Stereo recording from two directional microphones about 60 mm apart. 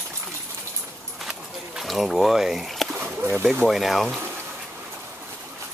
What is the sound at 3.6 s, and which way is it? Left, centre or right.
Speech, centre.